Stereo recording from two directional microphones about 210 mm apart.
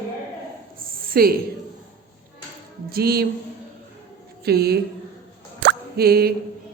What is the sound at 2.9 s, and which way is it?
Music, 45° right (ahead or behind).